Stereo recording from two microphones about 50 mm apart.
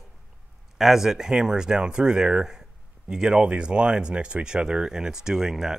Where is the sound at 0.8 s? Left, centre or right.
Centre.